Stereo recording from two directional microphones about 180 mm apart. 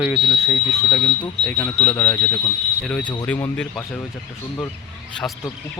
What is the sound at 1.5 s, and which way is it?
Speech, 10° left (ahead or behind).